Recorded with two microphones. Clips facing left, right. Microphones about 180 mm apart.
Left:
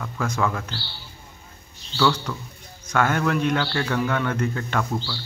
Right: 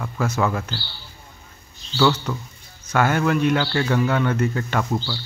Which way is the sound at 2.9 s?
5° right (ahead or behind).